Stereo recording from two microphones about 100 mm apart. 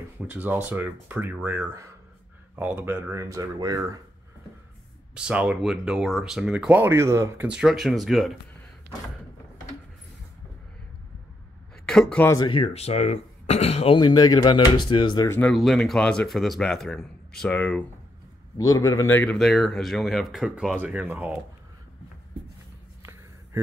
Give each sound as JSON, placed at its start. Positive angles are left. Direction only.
{"t": 0.2, "sound": "speech", "side_deg": -15}
{"t": 3.2, "sound": "speech", "side_deg": -35}
{"t": 5.1, "sound": "speech", "side_deg": -10}
{"t": 7.4, "sound": "speech", "side_deg": -5}
{"t": 11.8, "sound": "speech", "side_deg": 5}
{"t": 12.4, "sound": "speech", "side_deg": 55}
{"t": 12.6, "sound": "speech", "side_deg": 90}
{"t": 13.9, "sound": "speech", "side_deg": 40}
{"t": 15.5, "sound": "speech", "side_deg": 0}
{"t": 18.6, "sound": "a man's voice", "side_deg": 35}
{"t": 19.0, "sound": "speech", "side_deg": 20}
{"t": 19.3, "sound": "speech", "side_deg": 0}